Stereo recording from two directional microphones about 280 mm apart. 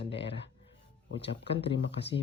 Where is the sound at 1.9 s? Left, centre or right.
Left.